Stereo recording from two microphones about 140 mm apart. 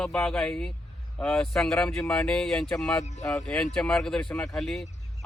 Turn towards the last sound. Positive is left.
turn(degrees=0)  # may be behind; listen again after turning